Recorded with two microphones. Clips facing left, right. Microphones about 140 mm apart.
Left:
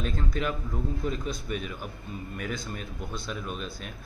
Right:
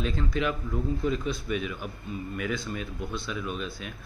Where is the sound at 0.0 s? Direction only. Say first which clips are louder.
Right 2 dB; 45° left (ahead or behind).